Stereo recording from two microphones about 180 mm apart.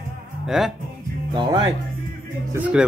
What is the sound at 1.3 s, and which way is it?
Speech, 25° right (ahead or behind).